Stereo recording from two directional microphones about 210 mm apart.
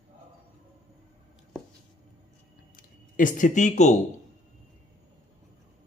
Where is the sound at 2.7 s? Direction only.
40° left (ahead or behind).